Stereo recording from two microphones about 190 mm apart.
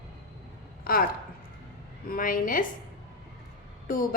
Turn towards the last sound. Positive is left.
turn(degrees=45)  # may be behind; listen again after turning